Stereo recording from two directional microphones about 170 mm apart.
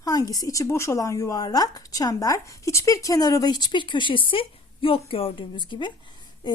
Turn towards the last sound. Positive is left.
turn(degrees=25)  # may be behind; listen again after turning